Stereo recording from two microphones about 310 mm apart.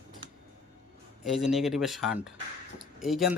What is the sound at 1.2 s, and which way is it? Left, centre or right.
Speech, centre.